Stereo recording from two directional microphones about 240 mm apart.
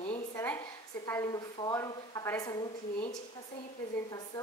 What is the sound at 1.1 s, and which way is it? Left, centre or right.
A woman's voice, centre.